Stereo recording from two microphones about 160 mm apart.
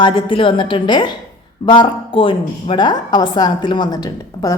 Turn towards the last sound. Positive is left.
turn(degrees=25)  # may be behind; listen again after turning